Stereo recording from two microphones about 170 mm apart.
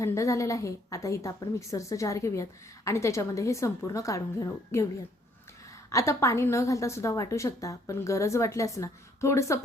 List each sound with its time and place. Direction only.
0.0 s a woman's voice: 15° left (ahead or behind)
5.9 s a woman's voice: 20° left (ahead or behind)